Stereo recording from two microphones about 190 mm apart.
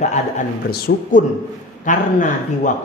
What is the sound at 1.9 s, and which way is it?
Speech, 40° left (ahead or behind).